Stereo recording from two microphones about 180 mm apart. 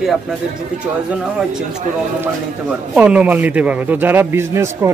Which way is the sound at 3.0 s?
5° right (ahead or behind).